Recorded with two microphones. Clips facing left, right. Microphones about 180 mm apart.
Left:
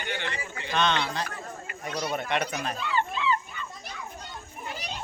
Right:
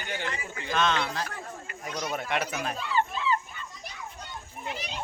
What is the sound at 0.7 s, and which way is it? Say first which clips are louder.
Speech: even; centre (ahead or behind).